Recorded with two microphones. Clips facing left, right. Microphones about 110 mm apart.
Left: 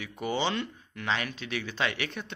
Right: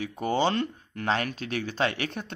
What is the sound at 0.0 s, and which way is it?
Speech, 40° right (ahead or behind).